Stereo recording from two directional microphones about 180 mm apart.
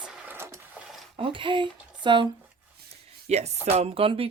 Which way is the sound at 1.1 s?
30° right (ahead or behind).